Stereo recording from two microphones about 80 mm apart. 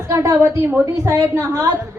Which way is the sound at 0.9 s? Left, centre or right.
Right.